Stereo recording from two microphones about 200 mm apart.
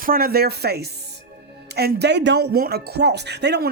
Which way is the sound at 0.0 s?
45° right (ahead or behind).